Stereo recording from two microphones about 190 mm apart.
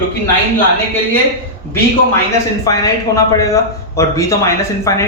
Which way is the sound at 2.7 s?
20° left (ahead or behind).